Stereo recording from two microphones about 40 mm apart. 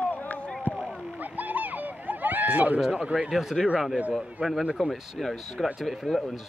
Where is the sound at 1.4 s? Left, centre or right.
Right.